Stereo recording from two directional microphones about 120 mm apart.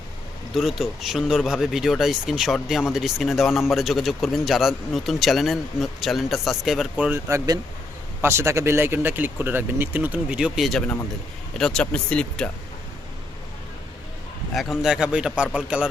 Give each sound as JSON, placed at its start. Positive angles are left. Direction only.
{"t": 0.5, "sound": "speech", "side_deg": 0}
{"t": 6.9, "sound": "speech", "side_deg": -15}
{"t": 7.3, "sound": "speech", "side_deg": -30}
{"t": 14.5, "sound": "speech", "side_deg": 0}